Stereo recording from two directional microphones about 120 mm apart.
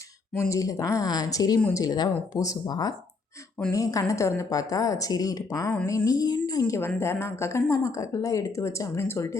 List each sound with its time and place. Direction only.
0.3 s a woman's voice: 25° left (ahead or behind)